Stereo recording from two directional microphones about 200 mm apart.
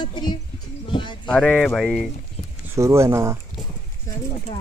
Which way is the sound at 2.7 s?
15° right (ahead or behind).